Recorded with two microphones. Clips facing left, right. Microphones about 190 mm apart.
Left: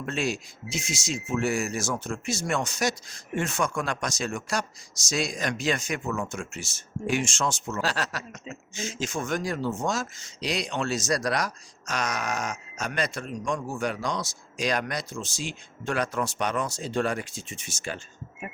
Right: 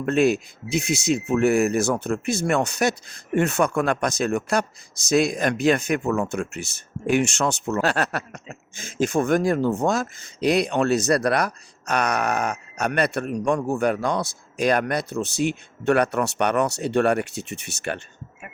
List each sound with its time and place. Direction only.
0.0 s speech: 60° right (ahead or behind)